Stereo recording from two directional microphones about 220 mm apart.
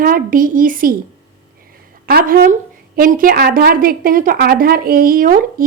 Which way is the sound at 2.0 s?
40° right (ahead or behind).